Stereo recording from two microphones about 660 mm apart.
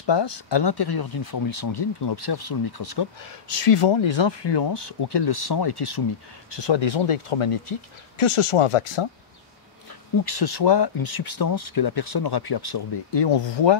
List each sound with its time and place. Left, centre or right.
0.0 s speech: left
10.2 s speech: left